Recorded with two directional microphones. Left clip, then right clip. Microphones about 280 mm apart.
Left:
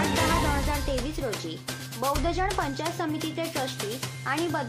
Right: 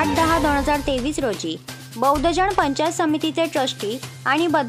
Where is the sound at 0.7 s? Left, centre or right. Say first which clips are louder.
Right 9 dB; right.